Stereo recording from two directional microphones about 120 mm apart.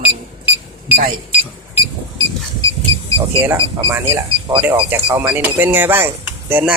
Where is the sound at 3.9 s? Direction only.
25° right (ahead or behind).